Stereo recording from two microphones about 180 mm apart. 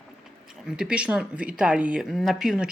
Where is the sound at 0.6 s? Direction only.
5° right (ahead or behind).